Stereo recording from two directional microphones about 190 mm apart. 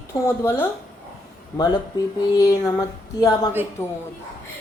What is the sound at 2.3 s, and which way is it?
Speech, 20° left (ahead or behind).